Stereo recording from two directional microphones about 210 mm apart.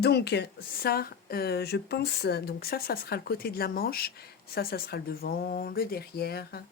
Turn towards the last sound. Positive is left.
turn(degrees=50)  # may be behind; listen again after turning